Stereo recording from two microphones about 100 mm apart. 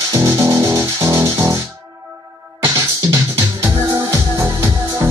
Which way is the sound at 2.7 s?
25° right (ahead or behind).